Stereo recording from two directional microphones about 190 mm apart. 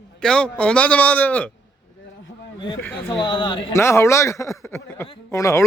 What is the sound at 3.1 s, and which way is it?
Speech, 25° left (ahead or behind).